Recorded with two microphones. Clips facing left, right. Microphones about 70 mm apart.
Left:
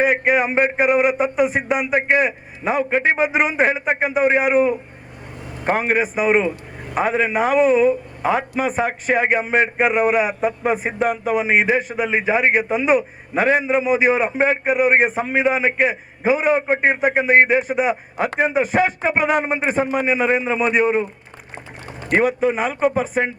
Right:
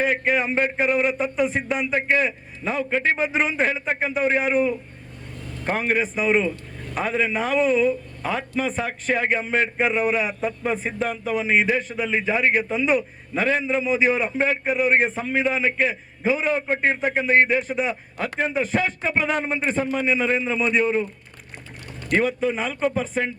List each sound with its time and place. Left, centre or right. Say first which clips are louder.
0.0 s a man's voice: left 5 dB; centre
5.7 s a man's voice: left 4 dB; centre